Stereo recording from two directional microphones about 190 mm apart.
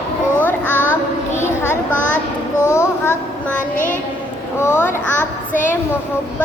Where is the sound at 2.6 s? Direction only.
15° left (ahead or behind).